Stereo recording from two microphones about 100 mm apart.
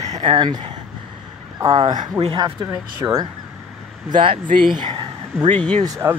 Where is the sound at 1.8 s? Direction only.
55° right (ahead or behind).